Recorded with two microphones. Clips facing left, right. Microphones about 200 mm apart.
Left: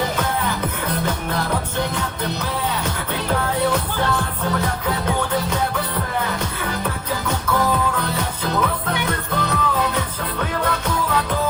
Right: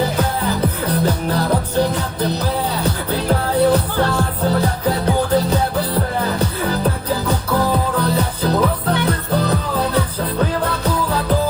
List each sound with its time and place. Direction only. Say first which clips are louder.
0.2 s music: right 4 dB; 35° right (ahead or behind)